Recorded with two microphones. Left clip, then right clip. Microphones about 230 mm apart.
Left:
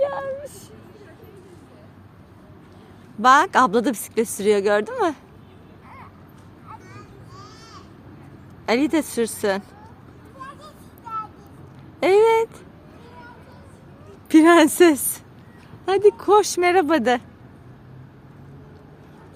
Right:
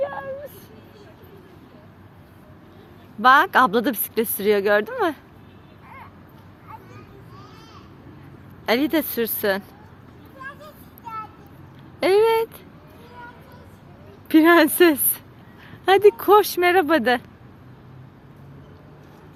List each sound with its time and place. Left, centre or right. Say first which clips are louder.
0.0 s a sound: left 4 dB; left
3.2 s speech: even; centre
8.6 s a woman's voice: even; centre
11.9 s a sound: left 2 dB; centre
14.3 s speech: left 1 dB; centre
15.9 s speech: right 2 dB; centre
16.4 s speech: even; centre